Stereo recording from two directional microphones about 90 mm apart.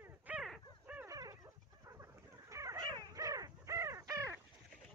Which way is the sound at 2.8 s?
40° right (ahead or behind).